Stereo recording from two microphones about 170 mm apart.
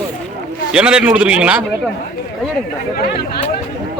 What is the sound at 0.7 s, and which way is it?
Speech, 5° right (ahead or behind).